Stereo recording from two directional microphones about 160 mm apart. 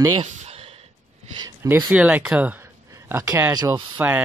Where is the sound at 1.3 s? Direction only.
25° right (ahead or behind).